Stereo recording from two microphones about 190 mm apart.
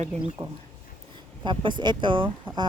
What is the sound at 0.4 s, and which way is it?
Speech, 30° right (ahead or behind).